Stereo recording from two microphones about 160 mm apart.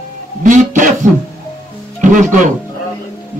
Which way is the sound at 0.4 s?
55° right (ahead or behind).